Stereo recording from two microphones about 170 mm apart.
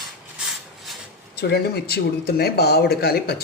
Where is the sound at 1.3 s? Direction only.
70° left (ahead or behind).